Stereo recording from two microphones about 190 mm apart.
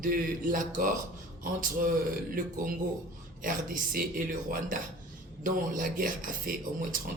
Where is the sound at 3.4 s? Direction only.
45° right (ahead or behind).